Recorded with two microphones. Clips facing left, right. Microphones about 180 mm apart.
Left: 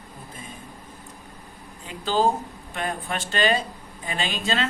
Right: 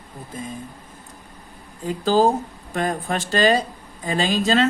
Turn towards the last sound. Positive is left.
turn(degrees=-40)  # may be behind; listen again after turning